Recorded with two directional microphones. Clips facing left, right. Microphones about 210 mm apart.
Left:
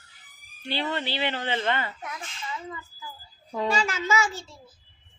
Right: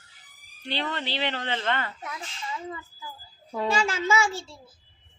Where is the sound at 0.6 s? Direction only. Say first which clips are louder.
Left 2 dB; 5° left (ahead or behind).